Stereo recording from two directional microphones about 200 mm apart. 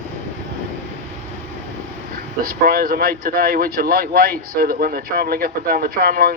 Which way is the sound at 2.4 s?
50° right (ahead or behind).